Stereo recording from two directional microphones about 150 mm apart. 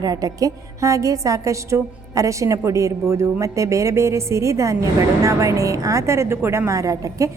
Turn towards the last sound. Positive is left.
turn(degrees=-20)  # may be behind; listen again after turning